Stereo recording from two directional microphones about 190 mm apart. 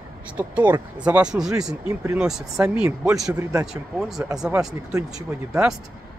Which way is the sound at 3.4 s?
15° right (ahead or behind).